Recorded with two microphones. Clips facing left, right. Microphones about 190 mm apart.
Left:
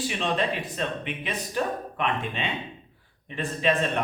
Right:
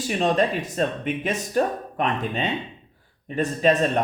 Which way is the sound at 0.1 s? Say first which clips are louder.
Right 9 dB; 45° right (ahead or behind).